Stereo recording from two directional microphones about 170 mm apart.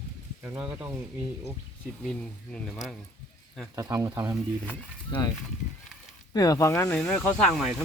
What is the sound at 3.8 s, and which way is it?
Speech, 20° right (ahead or behind).